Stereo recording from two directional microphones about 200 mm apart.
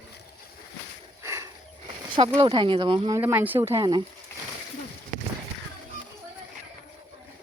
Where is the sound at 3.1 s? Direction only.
10° right (ahead or behind).